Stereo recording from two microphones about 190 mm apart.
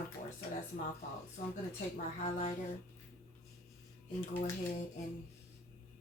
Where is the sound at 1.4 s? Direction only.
45° left (ahead or behind).